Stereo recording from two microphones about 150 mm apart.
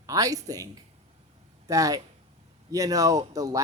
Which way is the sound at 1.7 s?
25° right (ahead or behind).